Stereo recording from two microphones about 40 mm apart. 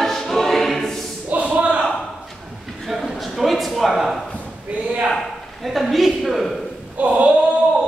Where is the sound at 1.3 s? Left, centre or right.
Right.